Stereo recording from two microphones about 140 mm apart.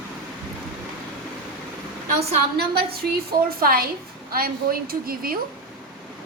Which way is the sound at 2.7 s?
90° right.